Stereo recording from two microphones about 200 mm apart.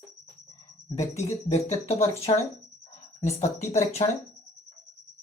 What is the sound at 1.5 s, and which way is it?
Speech, 30° left (ahead or behind).